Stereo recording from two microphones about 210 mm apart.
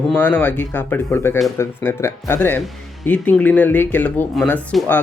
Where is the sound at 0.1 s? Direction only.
5° left (ahead or behind).